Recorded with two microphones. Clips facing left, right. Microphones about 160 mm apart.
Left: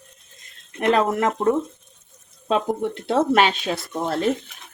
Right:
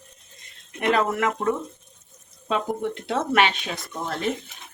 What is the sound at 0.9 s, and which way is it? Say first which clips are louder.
Speech: left 3 dB; 40° left (ahead or behind).